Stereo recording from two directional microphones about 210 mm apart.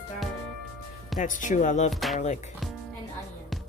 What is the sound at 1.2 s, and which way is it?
Speech, 35° left (ahead or behind).